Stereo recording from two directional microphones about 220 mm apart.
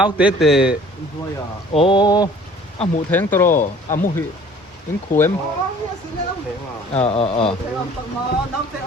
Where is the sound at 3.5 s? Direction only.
35° left (ahead or behind).